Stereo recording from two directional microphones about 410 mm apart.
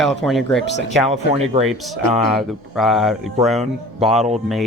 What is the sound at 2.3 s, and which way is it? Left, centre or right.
Speech, centre.